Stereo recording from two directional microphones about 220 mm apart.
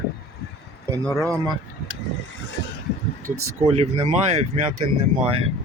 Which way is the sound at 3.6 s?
25° right (ahead or behind).